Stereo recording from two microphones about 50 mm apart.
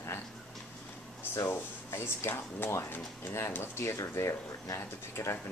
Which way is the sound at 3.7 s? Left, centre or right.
Left.